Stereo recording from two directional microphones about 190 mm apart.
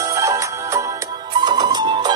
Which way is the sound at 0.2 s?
15° right (ahead or behind).